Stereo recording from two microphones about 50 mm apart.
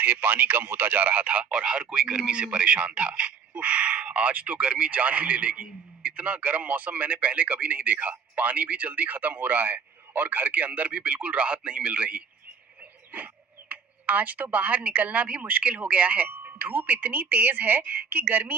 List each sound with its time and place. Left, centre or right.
0.0 s a man's voice: right